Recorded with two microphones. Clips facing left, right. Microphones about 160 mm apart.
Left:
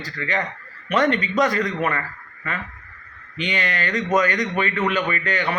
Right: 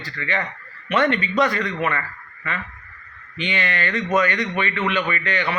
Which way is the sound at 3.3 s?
40° left (ahead or behind).